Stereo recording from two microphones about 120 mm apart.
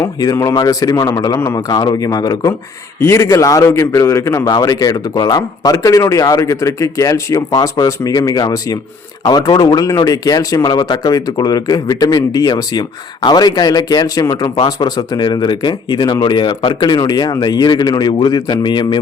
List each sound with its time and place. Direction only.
0.0 s a man's voice: 25° left (ahead or behind)